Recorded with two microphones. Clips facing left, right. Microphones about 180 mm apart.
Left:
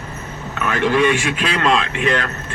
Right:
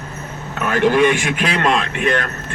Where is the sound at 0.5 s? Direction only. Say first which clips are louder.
Right 2 dB; 45° right (ahead or behind).